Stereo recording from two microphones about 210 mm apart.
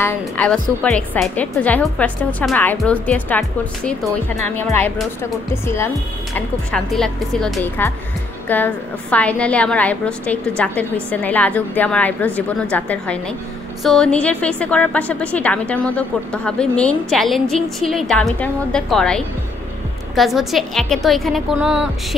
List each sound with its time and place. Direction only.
0.0 s a woman's voice: 5° left (ahead or behind)